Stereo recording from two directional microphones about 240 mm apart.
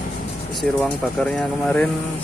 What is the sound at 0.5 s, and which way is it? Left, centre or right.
Speech, centre.